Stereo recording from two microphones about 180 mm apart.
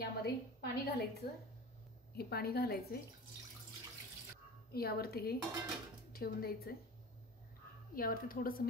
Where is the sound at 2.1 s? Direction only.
60° left (ahead or behind).